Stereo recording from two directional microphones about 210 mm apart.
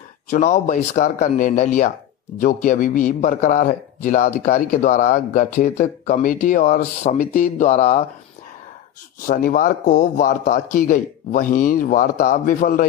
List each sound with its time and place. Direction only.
0.3 s speech: 35° left (ahead or behind)
9.2 s speech: 40° left (ahead or behind)